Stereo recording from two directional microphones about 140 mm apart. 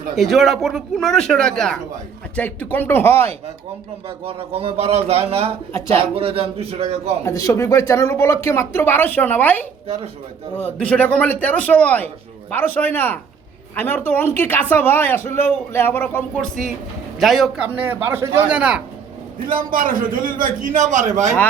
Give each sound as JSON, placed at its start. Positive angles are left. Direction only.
{"t": 0.2, "sound": "speech", "side_deg": 0}
{"t": 4.3, "sound": "a man's voice", "side_deg": -40}
{"t": 7.3, "sound": "speech", "side_deg": 20}
{"t": 17.2, "sound": "speech", "side_deg": 0}
{"t": 17.7, "sound": "speech", "side_deg": -15}
{"t": 19.5, "sound": "a man's voice", "side_deg": -85}